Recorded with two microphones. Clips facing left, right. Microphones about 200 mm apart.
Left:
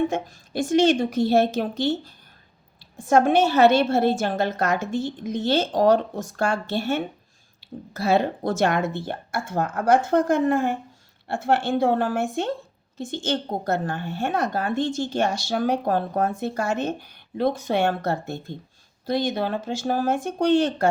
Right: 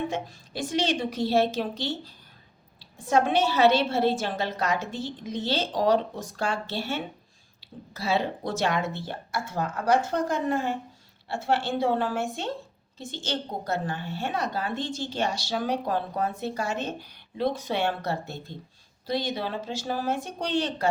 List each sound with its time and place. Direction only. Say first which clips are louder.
0.1 s a woman's voice: left 4 dB; 50° left (ahead or behind)
7.6 s a sound: left 10 dB; 50° left (ahead or behind)
7.9 s a woman's voice: left 6 dB; 50° left (ahead or behind)